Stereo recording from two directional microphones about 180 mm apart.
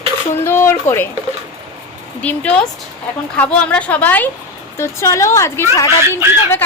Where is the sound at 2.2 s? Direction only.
10° left (ahead or behind).